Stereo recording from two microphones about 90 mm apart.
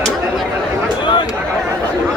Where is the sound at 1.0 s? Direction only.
60° left (ahead or behind).